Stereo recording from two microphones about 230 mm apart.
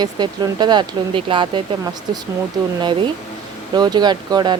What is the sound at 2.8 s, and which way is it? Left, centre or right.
Speech, right.